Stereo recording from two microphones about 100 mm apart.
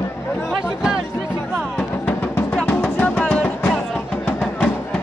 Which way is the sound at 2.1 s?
15° left (ahead or behind).